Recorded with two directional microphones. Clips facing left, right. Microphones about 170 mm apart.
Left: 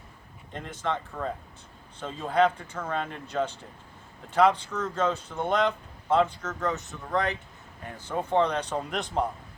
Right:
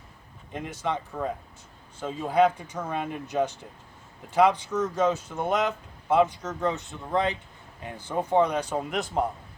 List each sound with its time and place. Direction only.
0.5 s speech: 10° right (ahead or behind)